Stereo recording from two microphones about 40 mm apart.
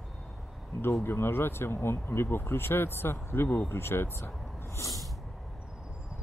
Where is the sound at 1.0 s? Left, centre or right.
Left.